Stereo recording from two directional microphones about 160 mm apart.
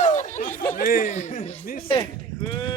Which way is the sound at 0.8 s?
65° left (ahead or behind).